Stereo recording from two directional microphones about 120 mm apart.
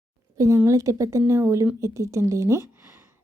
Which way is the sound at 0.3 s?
25° right (ahead or behind).